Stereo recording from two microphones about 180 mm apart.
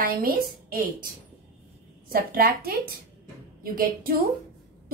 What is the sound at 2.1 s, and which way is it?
Speech, 55° right (ahead or behind).